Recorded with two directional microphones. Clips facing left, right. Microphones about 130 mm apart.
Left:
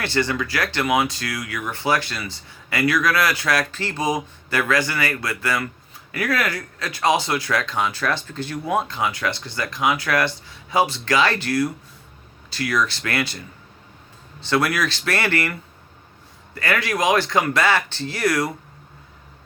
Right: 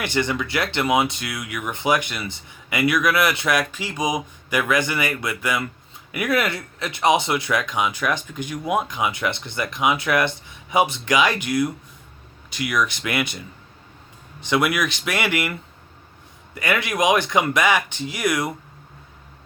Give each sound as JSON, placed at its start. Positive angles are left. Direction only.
{"t": 0.0, "sound": "speech", "side_deg": -20}
{"t": 14.4, "sound": "speech", "side_deg": -15}
{"t": 16.6, "sound": "speech", "side_deg": -20}